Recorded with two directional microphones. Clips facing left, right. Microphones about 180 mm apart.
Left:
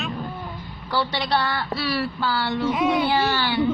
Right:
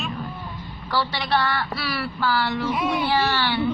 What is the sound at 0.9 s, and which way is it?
Speech, 15° left (ahead or behind).